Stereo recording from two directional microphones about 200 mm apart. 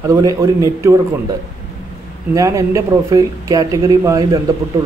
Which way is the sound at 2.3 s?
15° right (ahead or behind).